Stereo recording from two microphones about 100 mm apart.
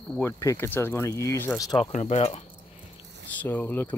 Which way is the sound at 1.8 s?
90° left.